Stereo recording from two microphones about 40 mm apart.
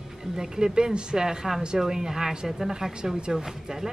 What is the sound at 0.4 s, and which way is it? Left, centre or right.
Speech, centre.